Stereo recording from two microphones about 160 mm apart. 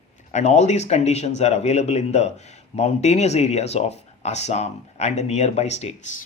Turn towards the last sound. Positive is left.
turn(degrees=45)  # may be behind; listen again after turning